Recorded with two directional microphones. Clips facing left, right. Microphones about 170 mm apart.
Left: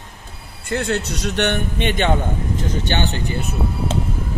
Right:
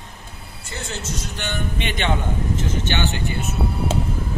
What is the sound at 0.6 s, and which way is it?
Speech, 60° left (ahead or behind).